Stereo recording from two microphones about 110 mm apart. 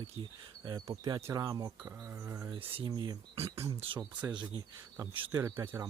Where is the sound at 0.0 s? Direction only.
45° right (ahead or behind).